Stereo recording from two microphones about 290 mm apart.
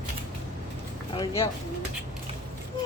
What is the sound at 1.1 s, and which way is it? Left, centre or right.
Speech, centre.